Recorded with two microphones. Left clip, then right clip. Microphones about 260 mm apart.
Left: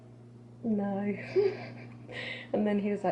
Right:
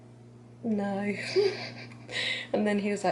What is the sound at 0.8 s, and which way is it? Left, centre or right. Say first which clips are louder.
Speech: right 5 dB; centre.